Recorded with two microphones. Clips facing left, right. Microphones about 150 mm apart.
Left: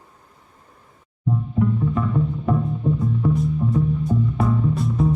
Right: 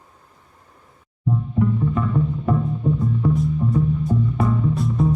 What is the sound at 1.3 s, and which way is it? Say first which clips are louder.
Music: even; centre (ahead or behind).